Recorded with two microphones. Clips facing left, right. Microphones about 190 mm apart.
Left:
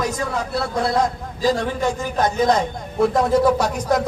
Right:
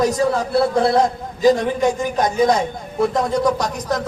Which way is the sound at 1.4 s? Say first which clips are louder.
Right 5 dB; 20° right (ahead or behind).